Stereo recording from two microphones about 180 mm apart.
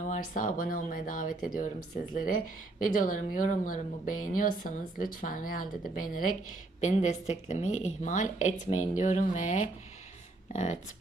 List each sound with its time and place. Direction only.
0.1 s a woman's voice: 45° left (ahead or behind)
2.8 s a woman's voice: 50° left (ahead or behind)